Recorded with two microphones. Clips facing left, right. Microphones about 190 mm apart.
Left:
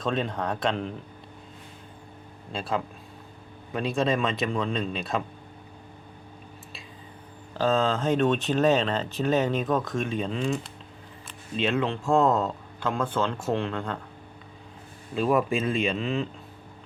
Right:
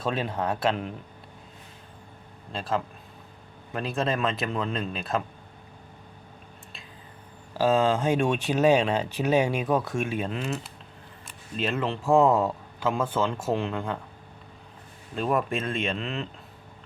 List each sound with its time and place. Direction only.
0.0 s speech: 5° right (ahead or behind)
2.5 s speech: centre (ahead or behind)
7.5 s speech: 10° right (ahead or behind)
15.1 s speech: centre (ahead or behind)